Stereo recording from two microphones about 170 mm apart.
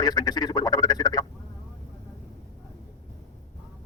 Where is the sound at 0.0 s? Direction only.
20° left (ahead or behind).